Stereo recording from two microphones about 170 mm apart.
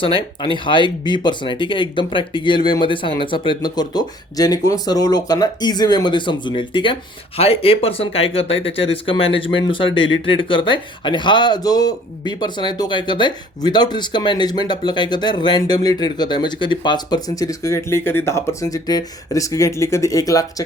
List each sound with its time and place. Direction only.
0.2 s speech: 30° left (ahead or behind)